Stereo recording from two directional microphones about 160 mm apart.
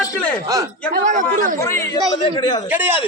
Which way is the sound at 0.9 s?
55° right (ahead or behind).